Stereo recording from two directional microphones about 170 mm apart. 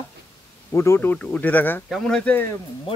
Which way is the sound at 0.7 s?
15° left (ahead or behind).